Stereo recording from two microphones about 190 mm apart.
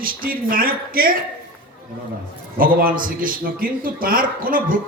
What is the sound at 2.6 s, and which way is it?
A man's voice, 50° right (ahead or behind).